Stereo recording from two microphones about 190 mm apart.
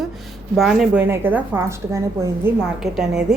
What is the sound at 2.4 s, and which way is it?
Speech, 5° right (ahead or behind).